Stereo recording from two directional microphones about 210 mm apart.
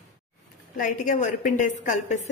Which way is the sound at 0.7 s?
40° left (ahead or behind).